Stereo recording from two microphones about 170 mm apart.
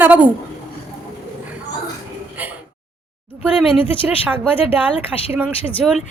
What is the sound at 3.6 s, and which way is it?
Speech, 30° left (ahead or behind).